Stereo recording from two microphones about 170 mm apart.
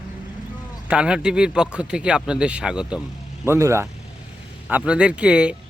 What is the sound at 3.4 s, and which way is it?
Speech, 15° right (ahead or behind).